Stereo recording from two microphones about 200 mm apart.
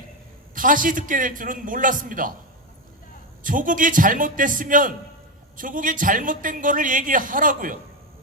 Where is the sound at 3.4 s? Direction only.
40° right (ahead or behind).